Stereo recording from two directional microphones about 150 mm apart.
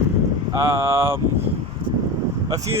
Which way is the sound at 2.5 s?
20° right (ahead or behind).